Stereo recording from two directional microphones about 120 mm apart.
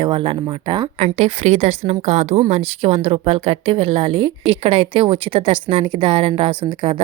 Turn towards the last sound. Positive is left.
turn(degrees=-45)  # may be behind; listen again after turning